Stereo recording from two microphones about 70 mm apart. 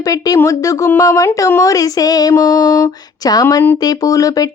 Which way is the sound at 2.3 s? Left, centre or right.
Left.